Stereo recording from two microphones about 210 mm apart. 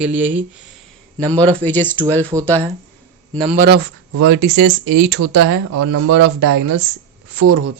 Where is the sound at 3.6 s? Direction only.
50° right (ahead or behind).